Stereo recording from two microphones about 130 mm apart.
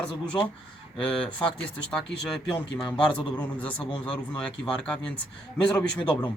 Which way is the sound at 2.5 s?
10° left (ahead or behind).